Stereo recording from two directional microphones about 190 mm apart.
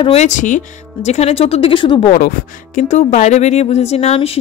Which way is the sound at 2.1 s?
50° left (ahead or behind).